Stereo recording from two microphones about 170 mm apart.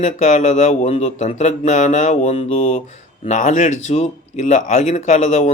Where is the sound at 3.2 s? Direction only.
45° left (ahead or behind).